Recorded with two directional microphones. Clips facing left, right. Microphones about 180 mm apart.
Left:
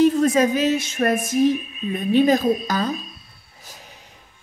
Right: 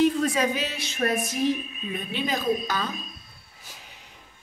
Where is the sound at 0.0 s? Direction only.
45° left (ahead or behind).